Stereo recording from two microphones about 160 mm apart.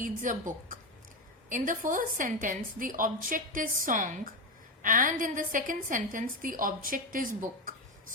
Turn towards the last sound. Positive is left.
turn(degrees=-60)  # may be behind; listen again after turning